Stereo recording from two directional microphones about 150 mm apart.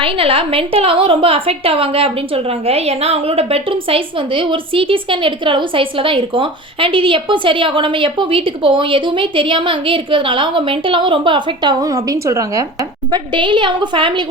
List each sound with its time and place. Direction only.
0.0 s a woman's voice: 35° right (ahead or behind)